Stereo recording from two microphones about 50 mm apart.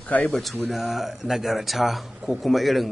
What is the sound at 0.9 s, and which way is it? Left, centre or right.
A man's voice, centre.